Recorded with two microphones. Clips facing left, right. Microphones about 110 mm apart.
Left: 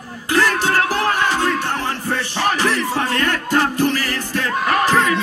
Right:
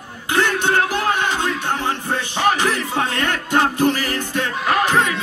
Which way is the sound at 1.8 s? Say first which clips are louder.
Even; 25° right (ahead or behind).